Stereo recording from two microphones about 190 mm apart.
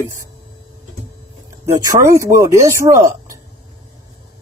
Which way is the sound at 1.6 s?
15° right (ahead or behind).